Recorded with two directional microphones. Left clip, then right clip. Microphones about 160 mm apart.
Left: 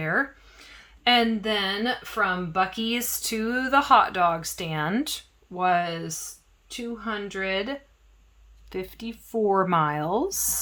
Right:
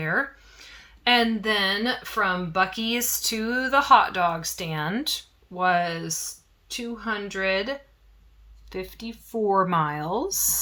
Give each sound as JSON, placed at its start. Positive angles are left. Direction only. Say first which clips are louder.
{"t": 0.0, "sound": "a sound", "louder": "even", "side_deg": 25}
{"t": 1.4, "sound": "speech", "louder": "right 2 dB", "side_deg": 10}
{"t": 8.7, "sound": "speech", "louder": "left 1 dB", "side_deg": 35}